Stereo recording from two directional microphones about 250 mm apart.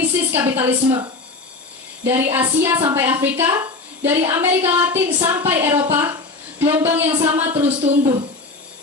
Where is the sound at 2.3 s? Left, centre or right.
Centre.